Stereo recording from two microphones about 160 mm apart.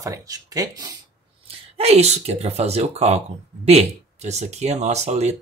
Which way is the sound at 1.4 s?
40° right (ahead or behind).